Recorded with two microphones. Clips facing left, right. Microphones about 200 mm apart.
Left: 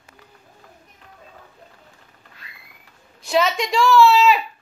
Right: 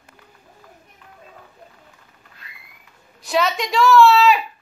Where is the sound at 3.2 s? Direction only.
Centre (ahead or behind).